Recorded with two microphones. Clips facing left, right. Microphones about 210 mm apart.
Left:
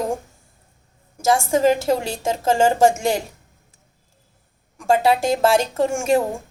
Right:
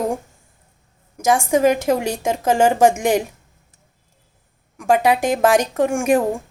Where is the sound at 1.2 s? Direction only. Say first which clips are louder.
Right 1 dB; 15° right (ahead or behind).